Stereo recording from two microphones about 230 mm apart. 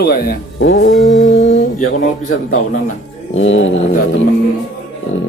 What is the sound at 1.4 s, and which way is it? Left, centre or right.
Mantra, left.